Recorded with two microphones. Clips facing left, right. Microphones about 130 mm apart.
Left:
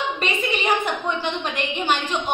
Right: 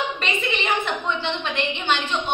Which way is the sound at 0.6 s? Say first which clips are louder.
Left 2 dB; 40° left (ahead or behind).